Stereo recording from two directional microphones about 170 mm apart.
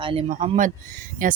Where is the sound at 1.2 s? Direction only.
55° right (ahead or behind).